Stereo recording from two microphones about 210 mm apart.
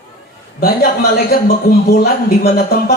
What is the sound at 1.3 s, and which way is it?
Speech, 45° left (ahead or behind).